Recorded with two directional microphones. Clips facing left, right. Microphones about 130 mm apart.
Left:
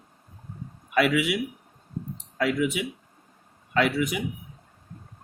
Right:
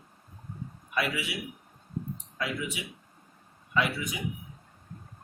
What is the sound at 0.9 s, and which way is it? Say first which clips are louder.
Speech: left 9 dB; 70° left (ahead or behind).